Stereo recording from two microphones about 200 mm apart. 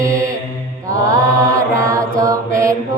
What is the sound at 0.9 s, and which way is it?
Mantra, 15° right (ahead or behind).